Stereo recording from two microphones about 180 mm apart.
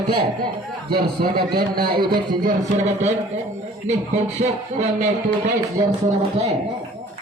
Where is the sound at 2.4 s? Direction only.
40° right (ahead or behind).